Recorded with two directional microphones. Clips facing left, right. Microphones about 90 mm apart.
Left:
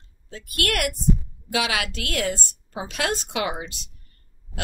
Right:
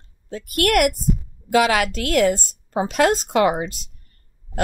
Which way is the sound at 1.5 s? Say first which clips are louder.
Right 8 dB; 45° right (ahead or behind).